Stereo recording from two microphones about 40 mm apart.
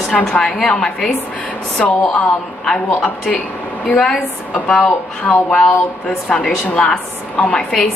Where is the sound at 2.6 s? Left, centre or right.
Centre.